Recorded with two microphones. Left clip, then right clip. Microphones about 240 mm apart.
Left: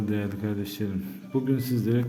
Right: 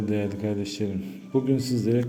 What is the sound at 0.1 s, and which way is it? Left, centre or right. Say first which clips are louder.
A man's voice: right 3 dB; centre.